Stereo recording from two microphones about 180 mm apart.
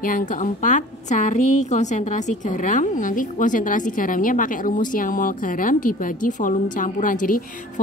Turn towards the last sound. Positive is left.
turn(degrees=50)  # may be behind; listen again after turning